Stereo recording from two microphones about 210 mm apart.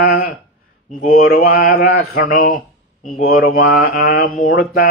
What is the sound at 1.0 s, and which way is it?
Music, 40° left (ahead or behind).